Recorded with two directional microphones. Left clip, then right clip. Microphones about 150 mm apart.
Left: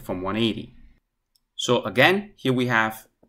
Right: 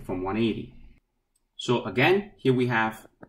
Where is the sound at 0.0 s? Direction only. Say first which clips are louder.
Left 2 dB; 20° left (ahead or behind).